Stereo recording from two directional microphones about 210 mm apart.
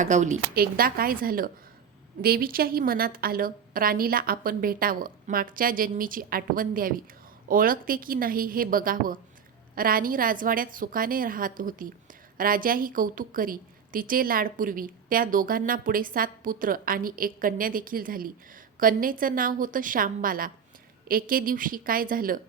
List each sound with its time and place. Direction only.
0.0 s a woman's voice: 35° right (ahead or behind)